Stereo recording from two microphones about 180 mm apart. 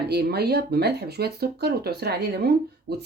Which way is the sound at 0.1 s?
65° right (ahead or behind).